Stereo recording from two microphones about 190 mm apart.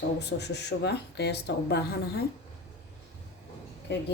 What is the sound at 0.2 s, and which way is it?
Speech, 60° left (ahead or behind).